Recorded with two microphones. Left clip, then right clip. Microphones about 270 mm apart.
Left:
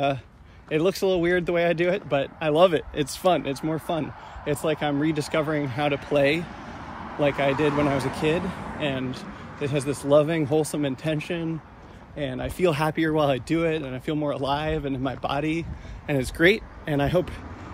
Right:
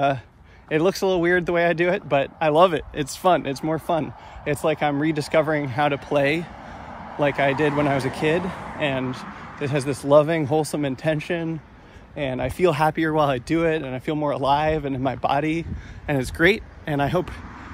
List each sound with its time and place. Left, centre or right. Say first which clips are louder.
0.7 s speech: right 2 dB; centre
8.4 s speech: right 3 dB; right
8.7 s speech: right 4 dB; centre